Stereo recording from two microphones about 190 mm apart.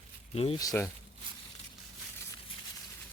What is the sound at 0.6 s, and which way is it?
Speech, 20° left (ahead or behind).